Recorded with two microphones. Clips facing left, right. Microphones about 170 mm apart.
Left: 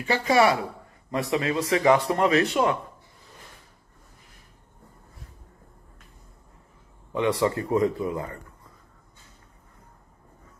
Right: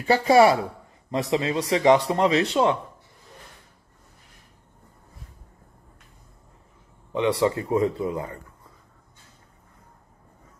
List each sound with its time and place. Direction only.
0.0 s speech: 30° right (ahead or behind)
7.1 s speech: 20° right (ahead or behind)